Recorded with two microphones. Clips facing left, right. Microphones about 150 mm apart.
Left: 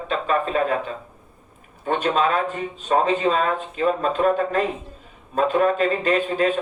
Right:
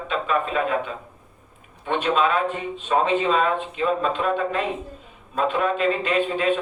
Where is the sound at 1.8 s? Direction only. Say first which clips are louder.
Left 1 dB; 40° left (ahead or behind).